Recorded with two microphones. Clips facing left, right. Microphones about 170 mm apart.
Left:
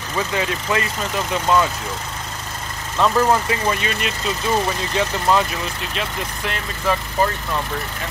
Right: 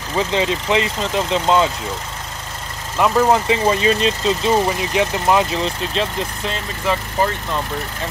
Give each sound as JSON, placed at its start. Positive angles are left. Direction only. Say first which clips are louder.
{"t": 0.1, "sound": "speech", "louder": "right 4 dB", "side_deg": -25}
{"t": 3.0, "sound": "speech", "louder": "right 2 dB", "side_deg": -20}